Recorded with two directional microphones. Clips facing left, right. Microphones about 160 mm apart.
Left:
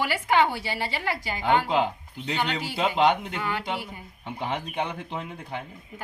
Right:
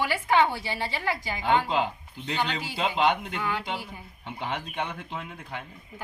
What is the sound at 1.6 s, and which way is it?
Speech, 55° left (ahead or behind).